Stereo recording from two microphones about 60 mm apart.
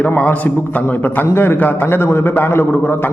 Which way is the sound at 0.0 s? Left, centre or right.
Left.